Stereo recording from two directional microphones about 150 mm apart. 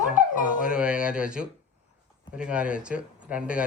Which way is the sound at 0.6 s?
5° right (ahead or behind).